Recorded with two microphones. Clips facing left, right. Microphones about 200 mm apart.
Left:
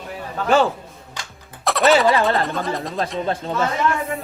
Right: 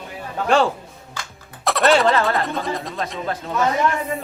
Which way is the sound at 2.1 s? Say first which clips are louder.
Left 1 dB; 15° left (ahead or behind).